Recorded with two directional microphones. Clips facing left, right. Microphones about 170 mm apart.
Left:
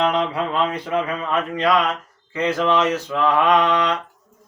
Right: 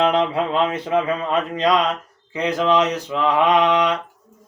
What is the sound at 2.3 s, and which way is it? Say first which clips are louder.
Mantra: right 1 dB; 15° right (ahead or behind).